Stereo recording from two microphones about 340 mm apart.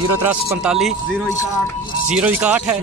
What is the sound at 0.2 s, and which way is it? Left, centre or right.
Speech, centre.